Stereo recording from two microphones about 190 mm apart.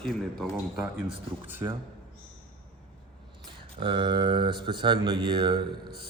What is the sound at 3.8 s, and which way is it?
Speech, 25° right (ahead or behind).